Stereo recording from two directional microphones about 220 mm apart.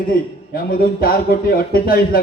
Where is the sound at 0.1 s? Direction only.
40° left (ahead or behind).